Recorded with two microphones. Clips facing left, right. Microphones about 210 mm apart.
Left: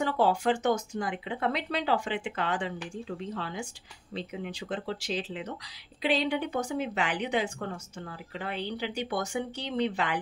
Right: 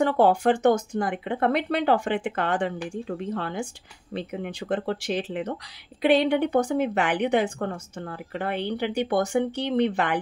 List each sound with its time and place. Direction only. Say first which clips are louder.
0.0 s speech: right 6 dB; 55° right (ahead or behind)